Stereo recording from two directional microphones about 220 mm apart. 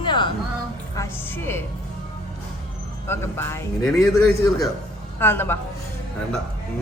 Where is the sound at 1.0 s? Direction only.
10° left (ahead or behind).